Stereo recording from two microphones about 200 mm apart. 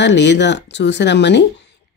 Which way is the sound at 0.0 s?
60° left (ahead or behind).